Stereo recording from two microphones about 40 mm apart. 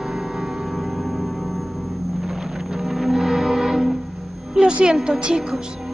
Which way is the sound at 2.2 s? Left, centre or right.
Centre.